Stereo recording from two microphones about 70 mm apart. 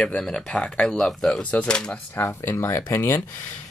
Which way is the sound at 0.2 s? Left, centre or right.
Centre.